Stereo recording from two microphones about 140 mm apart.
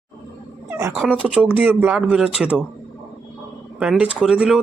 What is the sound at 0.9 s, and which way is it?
Speech, 5° right (ahead or behind).